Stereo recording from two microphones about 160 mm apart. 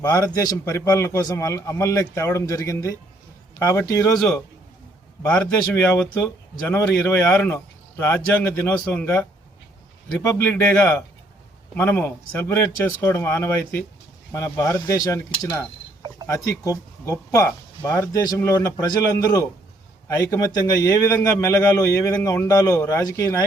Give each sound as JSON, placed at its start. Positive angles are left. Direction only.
{"t": 0.0, "sound": "a man's voice", "side_deg": 20}
{"t": 4.2, "sound": "a man's voice", "side_deg": 5}